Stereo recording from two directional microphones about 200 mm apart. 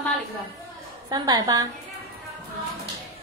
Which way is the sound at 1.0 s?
20° right (ahead or behind).